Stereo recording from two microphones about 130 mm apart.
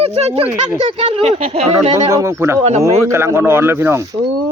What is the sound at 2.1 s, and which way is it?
Speech, 20° right (ahead or behind).